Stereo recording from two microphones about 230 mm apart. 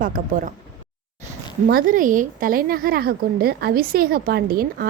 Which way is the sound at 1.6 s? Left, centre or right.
Right.